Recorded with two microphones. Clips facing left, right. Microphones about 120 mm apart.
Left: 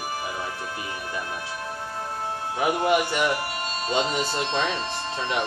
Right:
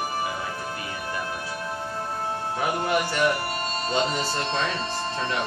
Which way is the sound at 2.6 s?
15° left (ahead or behind).